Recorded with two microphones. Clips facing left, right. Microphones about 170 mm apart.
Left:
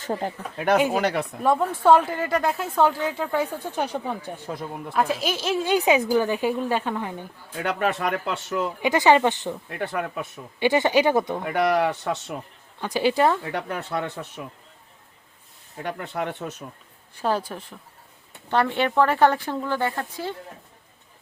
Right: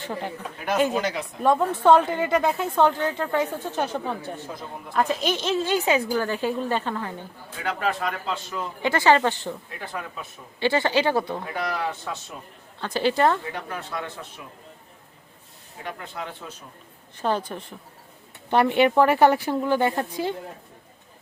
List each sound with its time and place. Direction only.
0.0 s speech: 40° left (ahead or behind)
0.8 s speech: 10° left (ahead or behind)
1.0 s speech: 60° left (ahead or behind)
1.4 s speech: 5° left (ahead or behind)
7.8 s a man's voice: 65° left (ahead or behind)
8.8 s speech: 15° left (ahead or behind)
9.7 s speech: 65° left (ahead or behind)
10.6 s speech: 15° left (ahead or behind)
11.5 s a man's voice: 70° left (ahead or behind)
12.8 s speech: 10° left (ahead or behind)
13.5 s a man's voice: 70° left (ahead or behind)
15.8 s speech: 60° left (ahead or behind)
17.2 s speech: 5° left (ahead or behind)
18.5 s speech: 15° right (ahead or behind)